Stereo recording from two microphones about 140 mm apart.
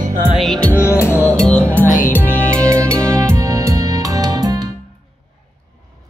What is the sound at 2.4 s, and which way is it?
Music, 10° left (ahead or behind).